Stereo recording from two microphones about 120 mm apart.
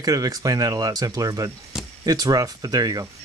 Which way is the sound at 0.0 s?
30° right (ahead or behind).